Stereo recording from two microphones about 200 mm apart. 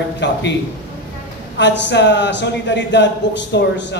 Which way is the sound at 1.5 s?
60° left (ahead or behind).